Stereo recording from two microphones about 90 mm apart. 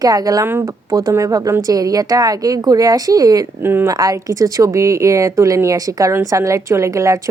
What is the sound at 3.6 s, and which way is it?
Speech, 25° right (ahead or behind).